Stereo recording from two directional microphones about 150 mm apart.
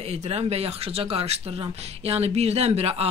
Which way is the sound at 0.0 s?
45° right (ahead or behind).